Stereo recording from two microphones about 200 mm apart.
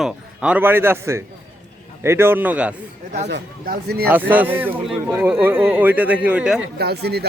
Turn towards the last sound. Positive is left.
turn(degrees=-55)  # may be behind; listen again after turning